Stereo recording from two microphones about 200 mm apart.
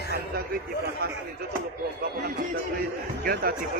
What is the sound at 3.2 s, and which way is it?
Speech, 50° right (ahead or behind).